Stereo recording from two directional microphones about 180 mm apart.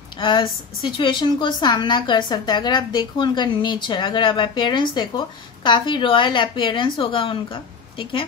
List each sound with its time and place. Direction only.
0.2 s a woman's voice: 25° left (ahead or behind)